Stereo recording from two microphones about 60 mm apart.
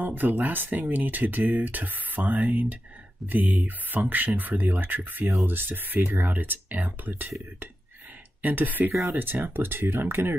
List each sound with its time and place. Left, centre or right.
0.0 s speech: right
8.4 s speech: right